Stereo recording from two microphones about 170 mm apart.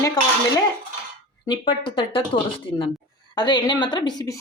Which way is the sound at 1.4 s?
25° left (ahead or behind).